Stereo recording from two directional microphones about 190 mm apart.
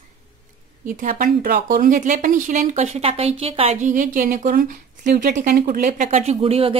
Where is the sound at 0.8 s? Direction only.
45° right (ahead or behind).